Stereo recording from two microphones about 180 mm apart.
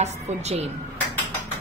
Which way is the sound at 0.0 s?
35° right (ahead or behind).